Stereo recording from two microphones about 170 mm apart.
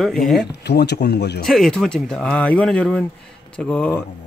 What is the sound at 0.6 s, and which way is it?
Speech, 75° left (ahead or behind).